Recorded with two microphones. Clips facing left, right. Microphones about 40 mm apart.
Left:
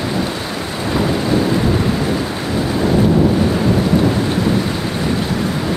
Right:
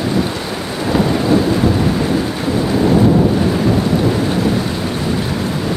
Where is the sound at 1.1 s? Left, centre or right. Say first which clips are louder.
Right 2 dB; centre.